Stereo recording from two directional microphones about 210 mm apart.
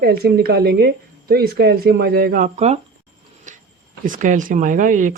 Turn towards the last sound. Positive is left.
turn(degrees=-40)  # may be behind; listen again after turning